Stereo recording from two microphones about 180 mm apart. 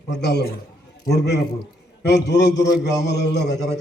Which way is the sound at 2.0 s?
70° left (ahead or behind).